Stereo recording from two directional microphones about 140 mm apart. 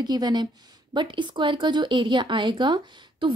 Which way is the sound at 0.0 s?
30° right (ahead or behind).